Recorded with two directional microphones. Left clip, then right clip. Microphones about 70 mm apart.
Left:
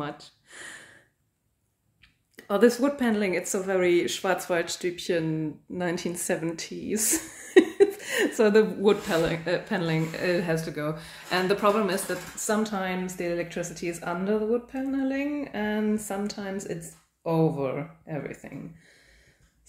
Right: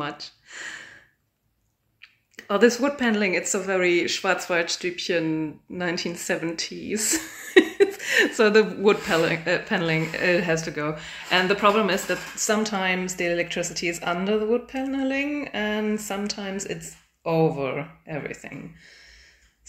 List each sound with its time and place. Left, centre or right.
0.0 s a sound: centre
2.3 s speech: centre
5.2 s speech: centre
5.8 s speech: left
6.9 s speech: left
7.7 s a sound: left
8.2 s speech: left
8.8 s speech: centre
14.9 s speech: centre